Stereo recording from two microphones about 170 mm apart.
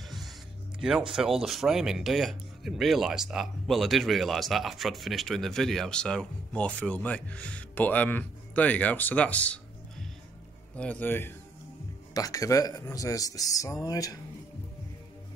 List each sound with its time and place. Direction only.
0.7 s a man's voice: 5° right (ahead or behind); by 14.1 s 20° left (ahead or behind)